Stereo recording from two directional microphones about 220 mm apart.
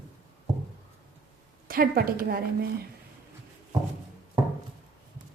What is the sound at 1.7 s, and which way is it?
Speech, 40° right (ahead or behind).